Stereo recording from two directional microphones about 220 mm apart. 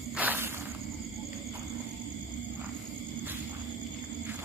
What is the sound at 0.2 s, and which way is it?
Walk, 10° right (ahead or behind).